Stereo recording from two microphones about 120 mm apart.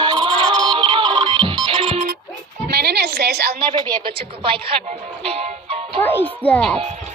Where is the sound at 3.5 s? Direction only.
40° right (ahead or behind).